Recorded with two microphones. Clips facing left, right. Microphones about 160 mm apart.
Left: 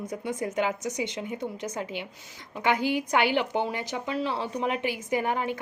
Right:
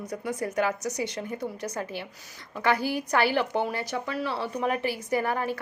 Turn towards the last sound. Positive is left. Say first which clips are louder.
# even
turn(degrees=20)  # may be behind; listen again after turning